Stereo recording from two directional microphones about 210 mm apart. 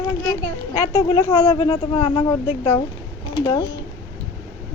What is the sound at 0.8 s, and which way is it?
Speech, 25° left (ahead or behind).